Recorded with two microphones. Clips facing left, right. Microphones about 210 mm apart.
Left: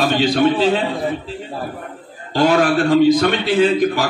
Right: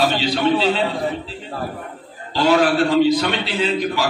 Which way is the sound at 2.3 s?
50° left (ahead or behind).